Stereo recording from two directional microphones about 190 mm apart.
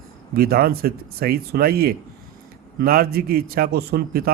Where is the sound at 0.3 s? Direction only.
55° right (ahead or behind).